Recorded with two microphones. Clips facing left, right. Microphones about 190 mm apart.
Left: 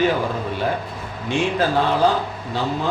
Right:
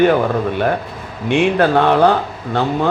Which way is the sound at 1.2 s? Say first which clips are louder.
Right 6 dB; 60° right (ahead or behind).